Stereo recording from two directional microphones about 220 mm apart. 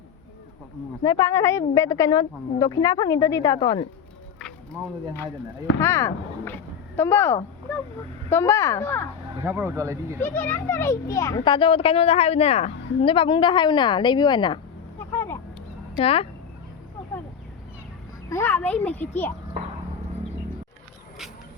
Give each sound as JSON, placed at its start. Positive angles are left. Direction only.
{"t": 1.0, "sound": "a woman's voice", "side_deg": 15}
{"t": 4.4, "sound": "a woman's voice", "side_deg": 5}
{"t": 9.4, "sound": "speech", "side_deg": -10}
{"t": 10.3, "sound": "a child's voice", "side_deg": 10}
{"t": 16.0, "sound": "a child's voice", "side_deg": 25}
{"t": 18.3, "sound": "a woman's voice", "side_deg": 10}